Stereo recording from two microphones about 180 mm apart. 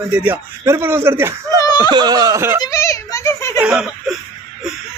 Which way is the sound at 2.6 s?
15° left (ahead or behind).